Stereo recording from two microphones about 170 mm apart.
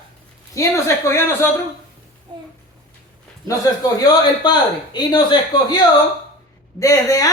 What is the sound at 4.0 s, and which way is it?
Speech, 25° left (ahead or behind).